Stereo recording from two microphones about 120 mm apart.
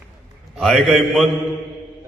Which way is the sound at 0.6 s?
Centre (ahead or behind).